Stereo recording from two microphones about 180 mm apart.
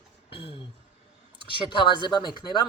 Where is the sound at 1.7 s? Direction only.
25° left (ahead or behind).